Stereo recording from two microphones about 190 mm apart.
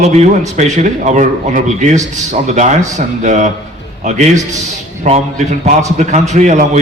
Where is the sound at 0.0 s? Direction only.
35° right (ahead or behind).